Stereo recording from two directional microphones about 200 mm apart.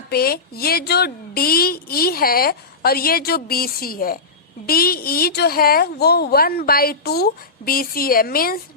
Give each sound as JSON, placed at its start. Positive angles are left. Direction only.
{"t": 0.1, "sound": "a woman's voice", "side_deg": 50}